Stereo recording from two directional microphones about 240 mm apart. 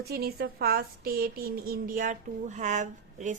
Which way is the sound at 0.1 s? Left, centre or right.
Right.